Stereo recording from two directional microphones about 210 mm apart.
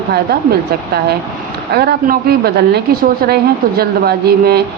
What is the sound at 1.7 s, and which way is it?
A woman's voice, 50° right (ahead or behind).